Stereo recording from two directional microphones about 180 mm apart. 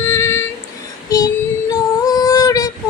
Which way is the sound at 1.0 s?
20° left (ahead or behind).